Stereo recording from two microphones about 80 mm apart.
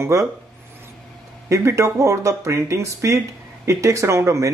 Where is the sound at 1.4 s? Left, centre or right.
Right.